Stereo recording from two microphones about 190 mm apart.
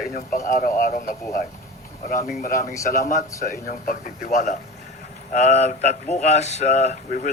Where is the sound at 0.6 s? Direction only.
45° left (ahead or behind).